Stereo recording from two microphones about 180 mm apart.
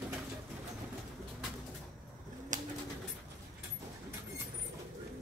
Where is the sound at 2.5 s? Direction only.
45° right (ahead or behind).